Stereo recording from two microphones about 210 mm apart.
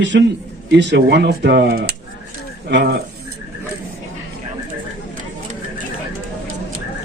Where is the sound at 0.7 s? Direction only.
55° right (ahead or behind).